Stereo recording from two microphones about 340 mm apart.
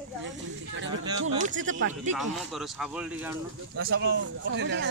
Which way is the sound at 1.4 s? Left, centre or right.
Right.